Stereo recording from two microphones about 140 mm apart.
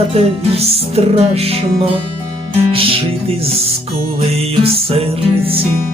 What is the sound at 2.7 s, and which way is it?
Music, 40° right (ahead or behind).